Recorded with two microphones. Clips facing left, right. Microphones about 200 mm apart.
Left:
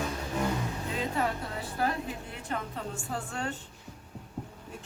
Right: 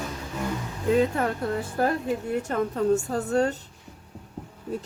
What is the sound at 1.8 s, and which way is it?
Speech, 50° right (ahead or behind).